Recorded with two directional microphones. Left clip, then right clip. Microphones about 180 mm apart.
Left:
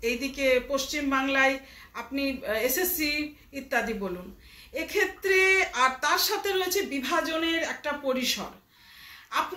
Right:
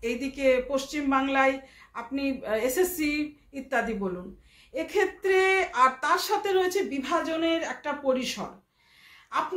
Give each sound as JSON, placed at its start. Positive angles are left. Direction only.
{"t": 0.0, "sound": "speech", "side_deg": -60}